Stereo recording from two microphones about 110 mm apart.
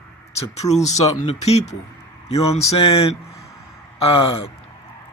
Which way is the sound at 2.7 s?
60° left (ahead or behind).